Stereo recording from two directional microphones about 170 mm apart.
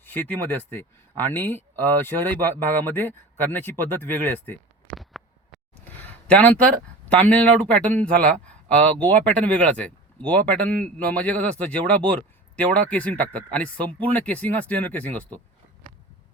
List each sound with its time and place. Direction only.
0.0 s speech: 10° left (ahead or behind)
4.9 s a sound: centre (ahead or behind)
7.1 s speech: 10° left (ahead or behind)